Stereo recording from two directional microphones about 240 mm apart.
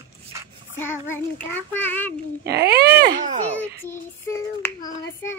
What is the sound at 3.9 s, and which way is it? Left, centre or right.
Child singing, centre.